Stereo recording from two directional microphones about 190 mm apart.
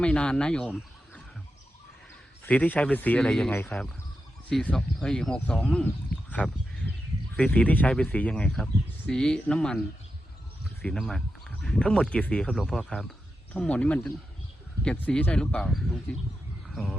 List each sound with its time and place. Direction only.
0.0 s speech: 5° left (ahead or behind)
2.4 s speech: 10° left (ahead or behind)
6.1 s a sound: 55° left (ahead or behind)
7.3 s speech: 5° left (ahead or behind)